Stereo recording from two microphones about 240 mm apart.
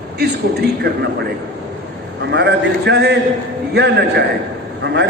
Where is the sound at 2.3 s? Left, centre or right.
Right.